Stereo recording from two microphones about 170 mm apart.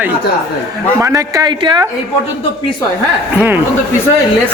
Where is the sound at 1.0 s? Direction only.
20° right (ahead or behind).